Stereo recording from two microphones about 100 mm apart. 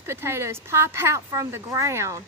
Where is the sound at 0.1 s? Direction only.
25° right (ahead or behind).